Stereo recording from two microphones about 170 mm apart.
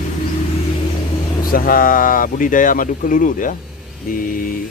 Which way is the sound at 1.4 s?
55° left (ahead or behind).